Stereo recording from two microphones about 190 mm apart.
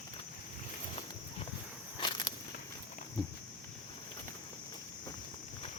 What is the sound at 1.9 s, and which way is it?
Walk, 25° left (ahead or behind).